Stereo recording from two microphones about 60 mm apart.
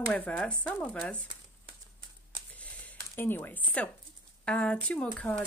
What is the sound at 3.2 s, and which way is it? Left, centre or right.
Speech, left.